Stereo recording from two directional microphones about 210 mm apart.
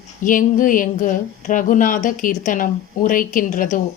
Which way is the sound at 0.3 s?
40° left (ahead or behind).